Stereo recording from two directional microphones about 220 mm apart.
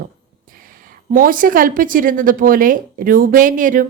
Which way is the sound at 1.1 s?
40° right (ahead or behind).